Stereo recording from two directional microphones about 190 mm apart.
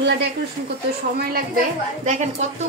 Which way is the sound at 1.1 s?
50° right (ahead or behind).